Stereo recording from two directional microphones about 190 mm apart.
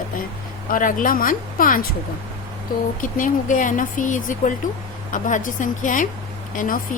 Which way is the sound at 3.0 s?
45° left (ahead or behind).